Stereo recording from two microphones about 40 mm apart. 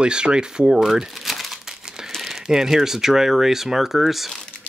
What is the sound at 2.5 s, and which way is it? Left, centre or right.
Speech, centre.